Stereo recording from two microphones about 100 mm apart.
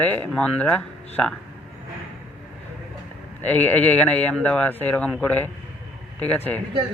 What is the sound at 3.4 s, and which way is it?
A man's voice, 20° left (ahead or behind).